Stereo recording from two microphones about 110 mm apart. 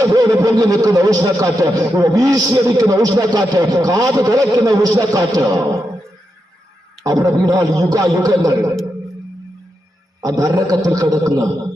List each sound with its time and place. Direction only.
0.0 s speech: 35° right (ahead or behind)
7.0 s speech: 35° right (ahead or behind)
10.2 s speech: 30° right (ahead or behind)